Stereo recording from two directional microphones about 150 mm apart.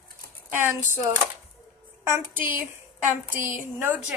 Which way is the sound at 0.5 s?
15° right (ahead or behind).